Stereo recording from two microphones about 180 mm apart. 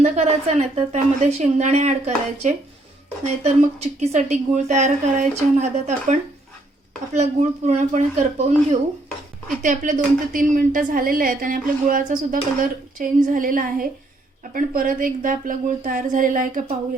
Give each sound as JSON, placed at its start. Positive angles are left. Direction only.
{"t": 0.0, "sound": "a woman's voice", "side_deg": -40}
{"t": 9.6, "sound": "a woman's voice", "side_deg": -45}